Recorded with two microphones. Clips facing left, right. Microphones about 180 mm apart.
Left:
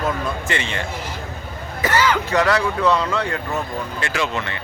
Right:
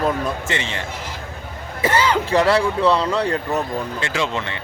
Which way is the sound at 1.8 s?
30° right (ahead or behind).